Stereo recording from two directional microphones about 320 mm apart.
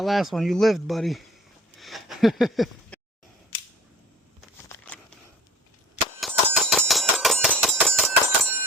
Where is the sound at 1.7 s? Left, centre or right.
Centre.